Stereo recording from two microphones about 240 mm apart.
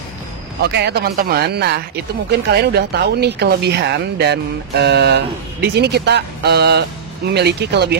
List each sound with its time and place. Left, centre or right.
0.6 s speech: right